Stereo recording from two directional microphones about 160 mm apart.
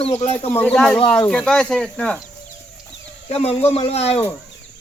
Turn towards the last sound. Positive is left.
turn(degrees=40)  # may be behind; listen again after turning